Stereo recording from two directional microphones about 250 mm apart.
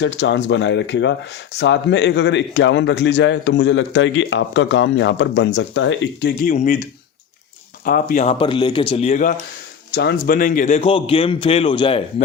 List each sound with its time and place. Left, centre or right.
0.0 s a man's voice: left
6.4 s speech: left
7.9 s a man's voice: left
9.9 s a man's voice: left